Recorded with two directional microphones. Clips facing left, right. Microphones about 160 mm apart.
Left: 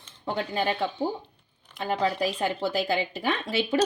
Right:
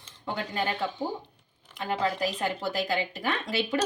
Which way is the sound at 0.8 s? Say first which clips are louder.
Left 3 dB; 15° left (ahead or behind).